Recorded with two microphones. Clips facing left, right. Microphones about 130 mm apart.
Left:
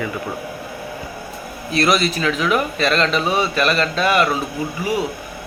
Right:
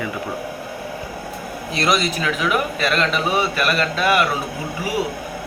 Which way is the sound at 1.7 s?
20° right (ahead or behind).